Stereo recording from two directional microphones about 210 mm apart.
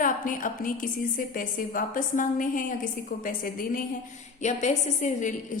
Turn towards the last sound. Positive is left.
turn(degrees=35)  # may be behind; listen again after turning